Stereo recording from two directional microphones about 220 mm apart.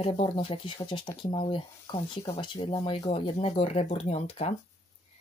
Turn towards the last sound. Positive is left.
turn(degrees=30)  # may be behind; listen again after turning